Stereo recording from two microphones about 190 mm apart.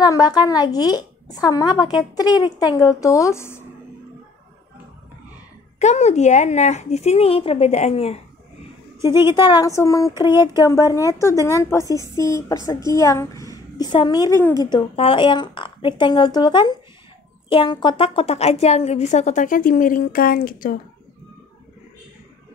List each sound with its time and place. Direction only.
0.0 s a woman's voice: 20° left (ahead or behind)
5.8 s a woman's voice: 35° left (ahead or behind)
9.3 s a woman's voice: 20° left (ahead or behind)
10.3 s speech: 15° right (ahead or behind)
10.6 s a woman's voice: 15° left (ahead or behind); by 20.7 s 45° left (ahead or behind)